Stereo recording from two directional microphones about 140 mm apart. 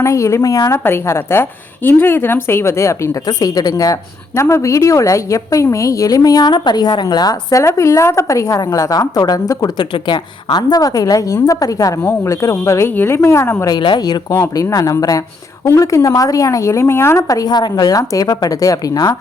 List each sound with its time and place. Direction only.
0.0 s a woman's voice: 20° left (ahead or behind)
13.7 s a woman's voice: 35° left (ahead or behind)